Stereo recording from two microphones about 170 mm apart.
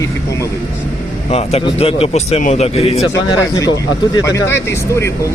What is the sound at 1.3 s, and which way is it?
A man's voice, 40° left (ahead or behind).